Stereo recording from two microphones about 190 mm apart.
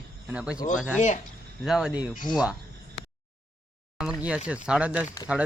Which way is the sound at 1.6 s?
5° right (ahead or behind).